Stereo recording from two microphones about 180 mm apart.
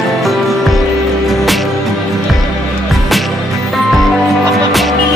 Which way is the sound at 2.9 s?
Centre (ahead or behind).